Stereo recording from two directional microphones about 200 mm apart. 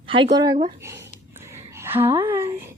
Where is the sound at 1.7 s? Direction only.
10° right (ahead or behind).